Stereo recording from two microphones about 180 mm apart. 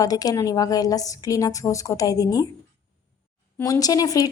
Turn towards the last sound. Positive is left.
turn(degrees=20)  # may be behind; listen again after turning